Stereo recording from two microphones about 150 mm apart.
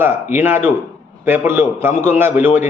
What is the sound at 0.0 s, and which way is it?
A man's voice, 15° right (ahead or behind).